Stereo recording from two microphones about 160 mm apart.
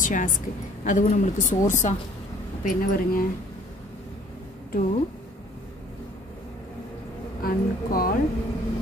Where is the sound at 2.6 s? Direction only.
65° left (ahead or behind).